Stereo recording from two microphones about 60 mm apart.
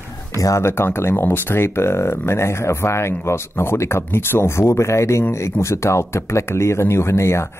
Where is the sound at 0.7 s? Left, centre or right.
Left.